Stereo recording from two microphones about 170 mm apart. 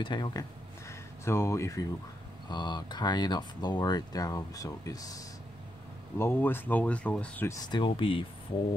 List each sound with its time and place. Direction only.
0.0 s speech: 25° left (ahead or behind)